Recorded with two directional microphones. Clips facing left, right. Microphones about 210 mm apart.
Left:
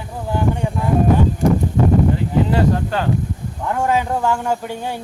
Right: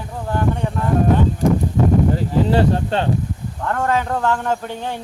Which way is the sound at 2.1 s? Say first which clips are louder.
Right 1 dB; 30° right (ahead or behind).